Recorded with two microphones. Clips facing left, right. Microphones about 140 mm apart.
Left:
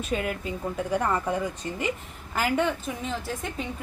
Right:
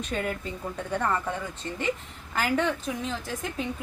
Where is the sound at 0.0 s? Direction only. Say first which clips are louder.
Left 2 dB; 5° left (ahead or behind).